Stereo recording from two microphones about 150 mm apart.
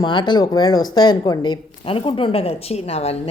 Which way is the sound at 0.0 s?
30° left (ahead or behind).